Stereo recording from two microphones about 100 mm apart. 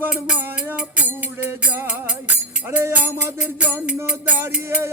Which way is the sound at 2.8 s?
25° right (ahead or behind).